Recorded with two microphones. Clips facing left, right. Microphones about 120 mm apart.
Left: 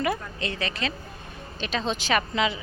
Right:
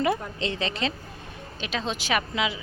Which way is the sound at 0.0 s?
25° right (ahead or behind).